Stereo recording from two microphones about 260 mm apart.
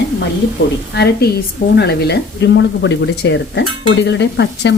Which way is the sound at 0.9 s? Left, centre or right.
Left.